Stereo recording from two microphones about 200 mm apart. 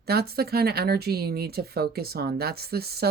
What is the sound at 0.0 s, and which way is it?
Speech, 50° right (ahead or behind).